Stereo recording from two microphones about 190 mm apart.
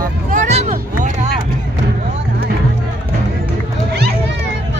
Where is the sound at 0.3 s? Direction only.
40° right (ahead or behind).